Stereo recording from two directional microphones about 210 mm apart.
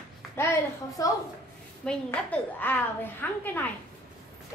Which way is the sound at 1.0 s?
15° left (ahead or behind).